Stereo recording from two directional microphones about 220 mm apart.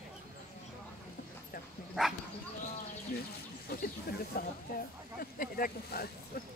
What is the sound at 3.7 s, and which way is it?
Speech, 45° left (ahead or behind).